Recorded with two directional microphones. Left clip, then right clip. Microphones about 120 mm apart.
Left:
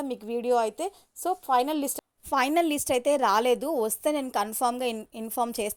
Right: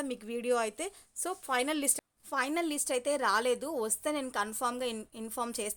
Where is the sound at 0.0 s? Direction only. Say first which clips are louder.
Left 6 dB; 15° left (ahead or behind).